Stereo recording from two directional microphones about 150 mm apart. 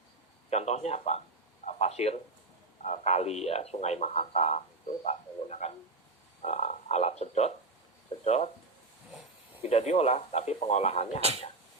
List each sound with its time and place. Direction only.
0.5 s a man's voice: 45° left (ahead or behind)
1.6 s a sound: 45° left (ahead or behind)
2.8 s speech: 45° left (ahead or behind)
9.6 s speech: 45° left (ahead or behind)